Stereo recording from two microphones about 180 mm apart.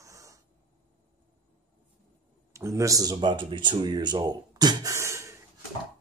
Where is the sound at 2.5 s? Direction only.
15° right (ahead or behind).